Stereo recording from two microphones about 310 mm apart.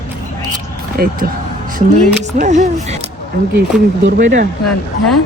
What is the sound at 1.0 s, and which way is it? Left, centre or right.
Speech, right.